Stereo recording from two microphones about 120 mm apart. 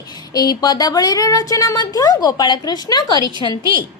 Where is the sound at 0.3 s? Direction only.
35° left (ahead or behind).